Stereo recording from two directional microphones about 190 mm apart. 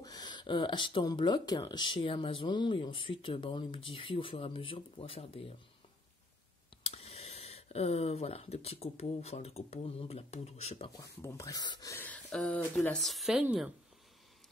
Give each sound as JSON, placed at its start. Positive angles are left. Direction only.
{"t": 0.0, "sound": "speech", "side_deg": 20}
{"t": 6.8, "sound": "speech", "side_deg": 30}
{"t": 11.0, "sound": "speech", "side_deg": 15}